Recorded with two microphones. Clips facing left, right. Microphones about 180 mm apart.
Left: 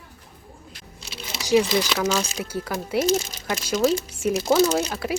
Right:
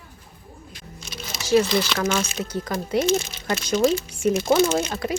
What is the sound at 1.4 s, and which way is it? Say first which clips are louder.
Speech: even; 15° left (ahead or behind).